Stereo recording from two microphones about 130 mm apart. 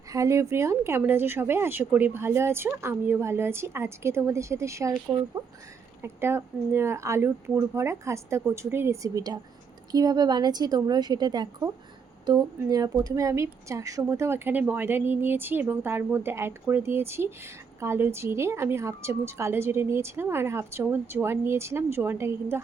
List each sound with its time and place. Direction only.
0.1 s a woman's voice: 25° right (ahead or behind)
6.0 s a woman's voice: 20° right (ahead or behind)